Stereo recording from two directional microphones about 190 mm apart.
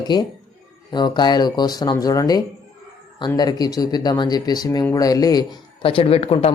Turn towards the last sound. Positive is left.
turn(degrees=30)  # may be behind; listen again after turning